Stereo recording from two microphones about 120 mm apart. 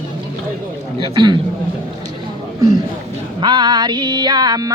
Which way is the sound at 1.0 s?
40° right (ahead or behind).